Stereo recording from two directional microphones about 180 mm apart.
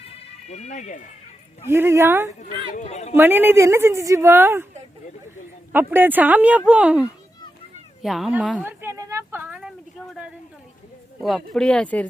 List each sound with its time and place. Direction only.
0.0 s bagpipes: 35° left (ahead or behind)
1.6 s speech: 15° right (ahead or behind)
2.4 s a man's voice: 40° left (ahead or behind)
3.2 s speech: 10° right (ahead or behind)
5.7 s speech: 10° right (ahead or behind)
8.6 s a sound: 15° right (ahead or behind)
11.2 s speech: centre (ahead or behind)